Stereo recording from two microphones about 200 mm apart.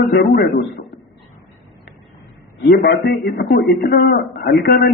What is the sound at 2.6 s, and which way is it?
A man's voice, 55° left (ahead or behind).